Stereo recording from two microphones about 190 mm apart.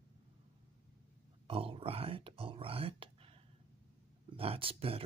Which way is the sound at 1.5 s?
30° right (ahead or behind).